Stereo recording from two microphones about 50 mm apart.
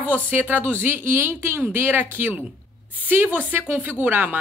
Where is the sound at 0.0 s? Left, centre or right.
Right.